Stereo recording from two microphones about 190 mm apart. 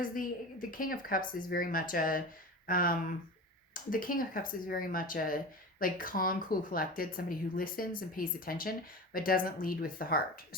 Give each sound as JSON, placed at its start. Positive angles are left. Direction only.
{"t": 0.0, "sound": "speech", "side_deg": 45}